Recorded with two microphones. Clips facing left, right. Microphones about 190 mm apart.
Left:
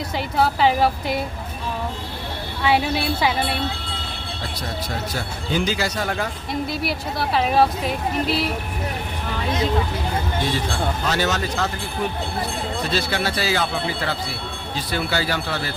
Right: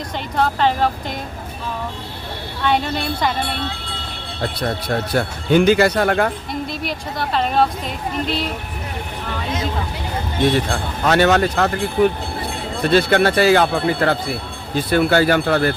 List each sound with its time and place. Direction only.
0.3 s a woman's voice: 5° left (ahead or behind)
2.6 s a woman's voice: 5° left (ahead or behind)
4.6 s speech: 60° right (ahead or behind)
6.5 s speech: 5° left (ahead or behind)
11.0 s speech: 60° right (ahead or behind)
12.8 s speech: 60° right (ahead or behind)